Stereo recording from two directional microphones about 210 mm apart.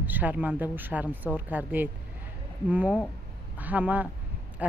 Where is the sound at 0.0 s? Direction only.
10° right (ahead or behind).